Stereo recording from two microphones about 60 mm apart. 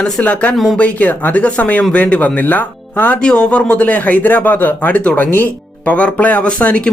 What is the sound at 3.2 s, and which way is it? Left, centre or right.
Speech, centre.